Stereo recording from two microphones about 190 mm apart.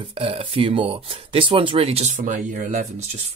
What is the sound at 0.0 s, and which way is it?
Speech, 30° right (ahead or behind).